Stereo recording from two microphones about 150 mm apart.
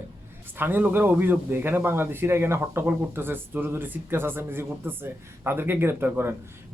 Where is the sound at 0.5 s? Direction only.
15° right (ahead or behind).